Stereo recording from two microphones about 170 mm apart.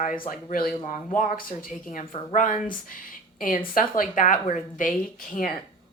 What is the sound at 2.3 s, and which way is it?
A woman's voice, 50° left (ahead or behind).